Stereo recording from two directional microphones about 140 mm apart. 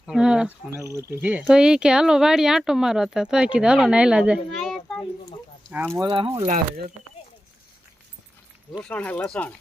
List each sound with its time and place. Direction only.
0.0 s speech: 5° right (ahead or behind)
0.7 s speech: 20° right (ahead or behind)
1.2 s speech: 10° right (ahead or behind)
6.0 s speech: 35° right (ahead or behind)
8.8 s speech: 10° left (ahead or behind)